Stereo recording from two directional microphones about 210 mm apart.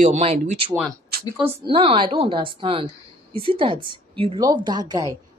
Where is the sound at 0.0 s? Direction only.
30° right (ahead or behind).